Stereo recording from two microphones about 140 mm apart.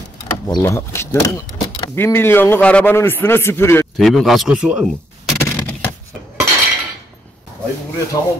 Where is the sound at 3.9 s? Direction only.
Centre (ahead or behind).